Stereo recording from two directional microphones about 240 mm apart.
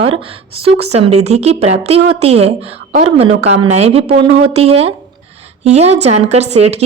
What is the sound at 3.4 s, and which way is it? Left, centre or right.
Speech, right.